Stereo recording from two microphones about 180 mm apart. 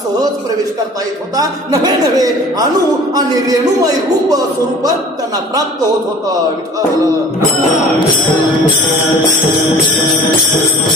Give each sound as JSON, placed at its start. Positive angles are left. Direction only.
{"t": 1.3, "sound": "a man's voice", "side_deg": -20}